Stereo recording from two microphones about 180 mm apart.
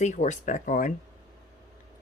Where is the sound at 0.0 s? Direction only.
40° left (ahead or behind).